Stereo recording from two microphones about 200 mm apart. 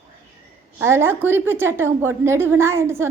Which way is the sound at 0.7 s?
10° right (ahead or behind).